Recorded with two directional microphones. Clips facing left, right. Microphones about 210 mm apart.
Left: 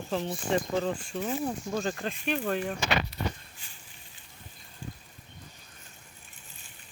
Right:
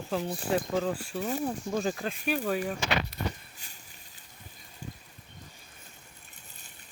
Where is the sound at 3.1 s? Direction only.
45° right (ahead or behind).